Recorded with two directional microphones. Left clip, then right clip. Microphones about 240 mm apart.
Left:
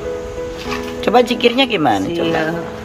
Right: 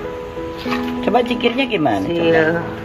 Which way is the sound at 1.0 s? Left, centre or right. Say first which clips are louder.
Left 5 dB; centre.